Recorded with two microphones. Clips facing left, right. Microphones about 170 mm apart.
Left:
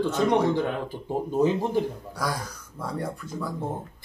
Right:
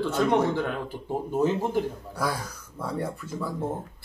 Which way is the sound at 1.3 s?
15° left (ahead or behind).